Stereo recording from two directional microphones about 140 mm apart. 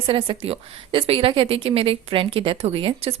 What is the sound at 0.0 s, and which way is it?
A woman's voice, 40° right (ahead or behind).